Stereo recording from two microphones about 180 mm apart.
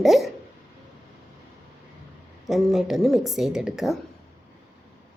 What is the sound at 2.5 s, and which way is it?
A woman's voice, centre (ahead or behind).